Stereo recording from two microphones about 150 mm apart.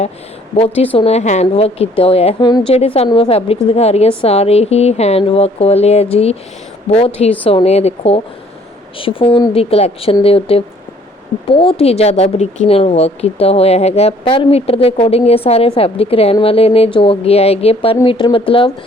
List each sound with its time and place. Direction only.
0.5 s speech: 40° left (ahead or behind)
2.4 s a woman's voice: 30° left (ahead or behind)
2.7 s speech: 45° left (ahead or behind)